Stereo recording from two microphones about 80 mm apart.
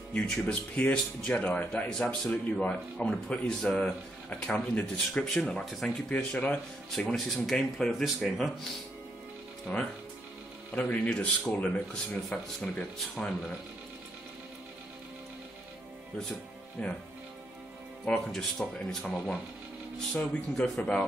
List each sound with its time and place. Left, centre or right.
0.1 s a man's voice: centre
9.7 s a man's voice: left
16.8 s a man's voice: centre
18.0 s a man's voice: centre